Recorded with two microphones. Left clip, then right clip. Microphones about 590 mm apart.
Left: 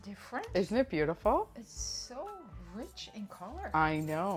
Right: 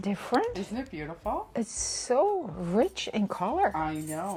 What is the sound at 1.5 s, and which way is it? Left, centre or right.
Speech, right.